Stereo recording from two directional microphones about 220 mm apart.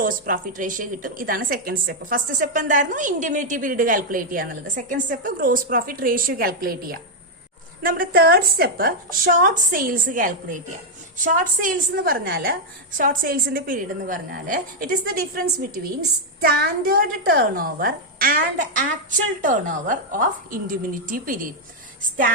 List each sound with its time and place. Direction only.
0.0 s a child's voice: 40° right (ahead or behind)
16.4 s a child's voice: 40° right (ahead or behind)